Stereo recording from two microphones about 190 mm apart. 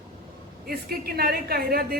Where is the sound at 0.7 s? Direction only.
55° right (ahead or behind).